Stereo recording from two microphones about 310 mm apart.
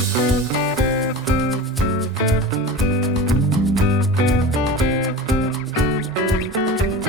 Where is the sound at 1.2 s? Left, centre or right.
Centre.